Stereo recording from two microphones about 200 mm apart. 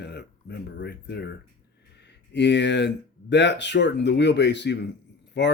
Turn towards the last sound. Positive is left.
turn(degrees=60)  # may be behind; listen again after turning